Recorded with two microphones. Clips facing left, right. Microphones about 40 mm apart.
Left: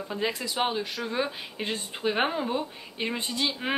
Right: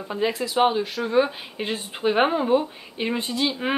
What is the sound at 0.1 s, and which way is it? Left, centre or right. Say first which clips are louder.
Speech: right 7 dB; centre.